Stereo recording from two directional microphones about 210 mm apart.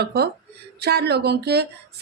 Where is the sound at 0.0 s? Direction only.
50° right (ahead or behind).